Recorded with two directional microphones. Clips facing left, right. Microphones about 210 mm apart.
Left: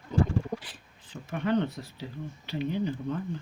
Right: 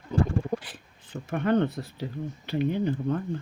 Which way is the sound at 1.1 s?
55° right (ahead or behind).